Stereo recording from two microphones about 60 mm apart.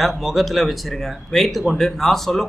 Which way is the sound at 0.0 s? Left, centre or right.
Centre.